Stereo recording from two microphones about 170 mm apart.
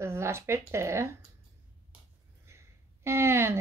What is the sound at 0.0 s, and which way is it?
Speech, 15° right (ahead or behind).